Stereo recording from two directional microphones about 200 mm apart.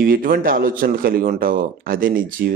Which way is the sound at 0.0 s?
45° right (ahead or behind).